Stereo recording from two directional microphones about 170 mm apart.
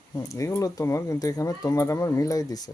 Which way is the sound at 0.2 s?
20° left (ahead or behind).